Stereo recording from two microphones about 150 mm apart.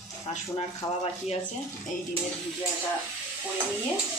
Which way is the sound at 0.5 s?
40° left (ahead or behind).